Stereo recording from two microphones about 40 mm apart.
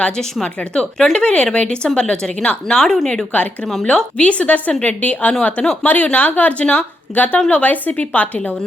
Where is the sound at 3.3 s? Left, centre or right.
Left.